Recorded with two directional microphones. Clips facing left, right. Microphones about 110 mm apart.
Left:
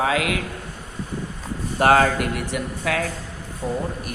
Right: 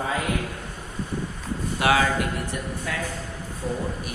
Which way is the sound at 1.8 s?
50° left (ahead or behind).